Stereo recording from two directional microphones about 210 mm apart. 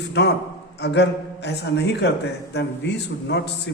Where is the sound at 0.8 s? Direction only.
55° left (ahead or behind).